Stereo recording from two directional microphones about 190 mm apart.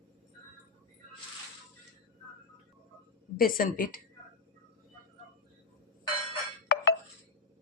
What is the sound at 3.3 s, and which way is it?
Speech, 50° left (ahead or behind).